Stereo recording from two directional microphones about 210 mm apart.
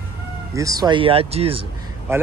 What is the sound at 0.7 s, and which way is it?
Speech, 20° right (ahead or behind).